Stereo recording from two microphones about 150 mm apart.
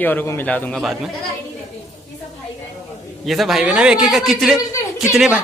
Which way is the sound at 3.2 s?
Centre (ahead or behind).